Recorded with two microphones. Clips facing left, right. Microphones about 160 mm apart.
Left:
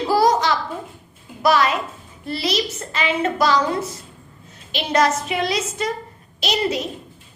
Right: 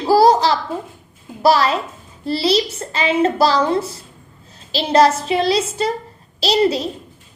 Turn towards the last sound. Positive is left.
turn(degrees=-30)  # may be behind; listen again after turning